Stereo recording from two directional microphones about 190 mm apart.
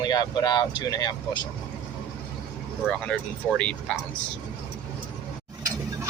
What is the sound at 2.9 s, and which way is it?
Speech, 5° left (ahead or behind).